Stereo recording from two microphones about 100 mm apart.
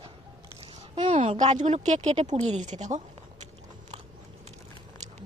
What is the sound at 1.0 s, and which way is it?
Speech, 60° right (ahead or behind).